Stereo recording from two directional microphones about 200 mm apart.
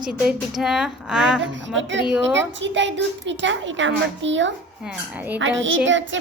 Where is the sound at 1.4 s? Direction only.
65° right (ahead or behind).